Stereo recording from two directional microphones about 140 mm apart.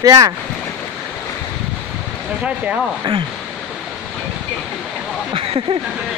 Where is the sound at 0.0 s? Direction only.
25° right (ahead or behind).